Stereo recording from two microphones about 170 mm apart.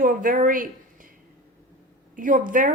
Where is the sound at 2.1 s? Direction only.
50° right (ahead or behind).